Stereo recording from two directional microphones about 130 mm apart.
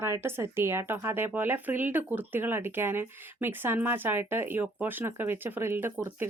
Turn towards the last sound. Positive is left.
turn(degrees=-15)  # may be behind; listen again after turning